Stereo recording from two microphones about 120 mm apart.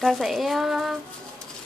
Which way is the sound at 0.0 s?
Centre (ahead or behind).